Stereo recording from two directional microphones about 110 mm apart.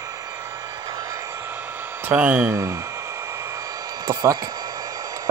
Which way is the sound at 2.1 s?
15° right (ahead or behind).